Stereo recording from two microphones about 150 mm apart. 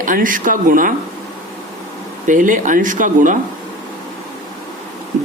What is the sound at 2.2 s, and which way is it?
Speech, 60° right (ahead or behind).